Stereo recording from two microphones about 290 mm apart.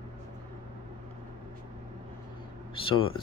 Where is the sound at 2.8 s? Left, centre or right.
Centre.